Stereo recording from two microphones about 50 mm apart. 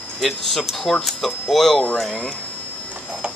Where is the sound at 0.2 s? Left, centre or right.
Centre.